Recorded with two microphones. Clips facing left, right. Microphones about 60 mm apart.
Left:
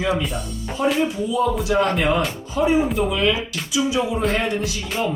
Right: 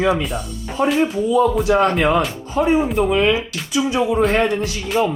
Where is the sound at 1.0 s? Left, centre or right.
Right.